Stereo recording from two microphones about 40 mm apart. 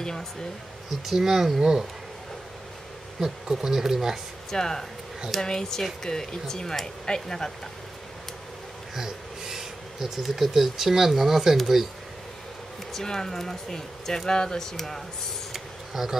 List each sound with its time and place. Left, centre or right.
0.0 s speech: centre
0.8 s speech: centre
1.6 s speech: centre
3.2 s speech: centre
4.5 s speech: centre
8.9 s speech: centre
12.9 s speech: centre
15.5 s a sound: centre